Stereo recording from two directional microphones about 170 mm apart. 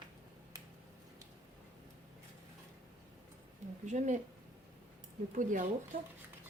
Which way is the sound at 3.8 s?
45° right (ahead or behind).